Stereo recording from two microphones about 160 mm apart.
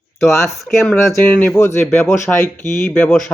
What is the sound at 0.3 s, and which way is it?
Speech, 15° left (ahead or behind).